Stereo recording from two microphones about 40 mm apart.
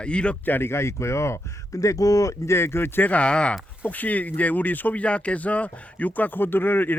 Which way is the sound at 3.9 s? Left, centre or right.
Left.